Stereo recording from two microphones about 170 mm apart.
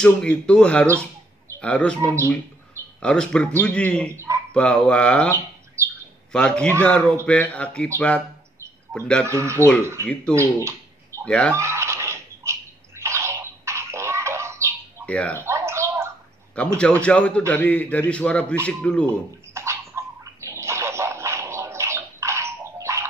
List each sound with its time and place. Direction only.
0.0 s a man's voice: 5° left (ahead or behind)
3.0 s a man's voice: 5° left (ahead or behind)
4.1 s speech: 15° right (ahead or behind)
4.6 s a man's voice: 5° left (ahead or behind)
6.3 s a man's voice: 5° left (ahead or behind)
8.9 s a man's voice: 5° left (ahead or behind)
9.2 s speech: 15° right (ahead or behind)
10.3 s a sound: 15° right (ahead or behind)
11.2 s a man's voice: 5° left (ahead or behind)
11.5 s bathtub: 15° right (ahead or behind)
15.0 s speech: 5° left (ahead or behind)
15.3 s bird: 15° right (ahead or behind)
16.5 s a man's voice: 5° left (ahead or behind)
19.0 s a sound: 15° right (ahead or behind)